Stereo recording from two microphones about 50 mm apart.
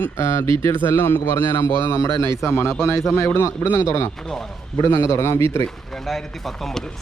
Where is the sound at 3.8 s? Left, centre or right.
Left.